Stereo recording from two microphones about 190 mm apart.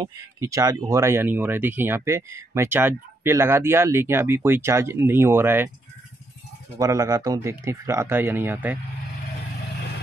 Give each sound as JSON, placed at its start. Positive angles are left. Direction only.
{"t": 0.0, "sound": "speech", "side_deg": -15}
{"t": 6.8, "sound": "speech", "side_deg": -15}